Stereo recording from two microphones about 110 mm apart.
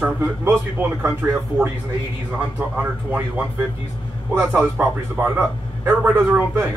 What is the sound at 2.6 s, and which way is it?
A man's voice, 15° right (ahead or behind).